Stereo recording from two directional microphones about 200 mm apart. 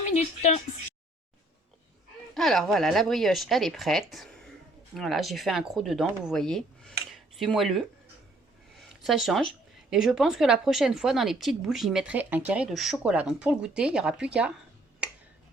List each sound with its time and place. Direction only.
0.1 s a woman's voice: 35° left (ahead or behind)
2.3 s a woman's voice: centre (ahead or behind)
15.0 s finger snapping: 5° right (ahead or behind)